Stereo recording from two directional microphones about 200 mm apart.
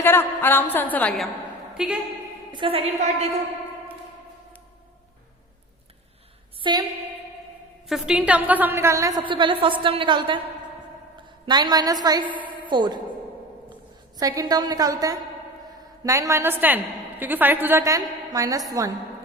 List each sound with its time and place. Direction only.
0.0 s a woman's voice: 10° left (ahead or behind)
2.5 s a woman's voice: 25° right (ahead or behind)
6.6 s a woman's voice: 20° right (ahead or behind)
7.9 s a woman's voice: centre (ahead or behind); by 10.4 s 25° right (ahead or behind)
11.4 s a woman's voice: 20° right (ahead or behind)
14.2 s a woman's voice: 20° right (ahead or behind)